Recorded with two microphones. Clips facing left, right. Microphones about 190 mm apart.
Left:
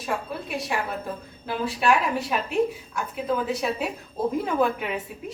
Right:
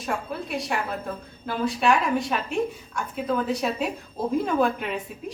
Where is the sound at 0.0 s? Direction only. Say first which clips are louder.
Even; centre (ahead or behind).